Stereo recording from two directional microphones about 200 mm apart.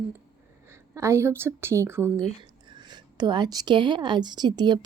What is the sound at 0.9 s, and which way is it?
A woman's voice, 15° right (ahead or behind).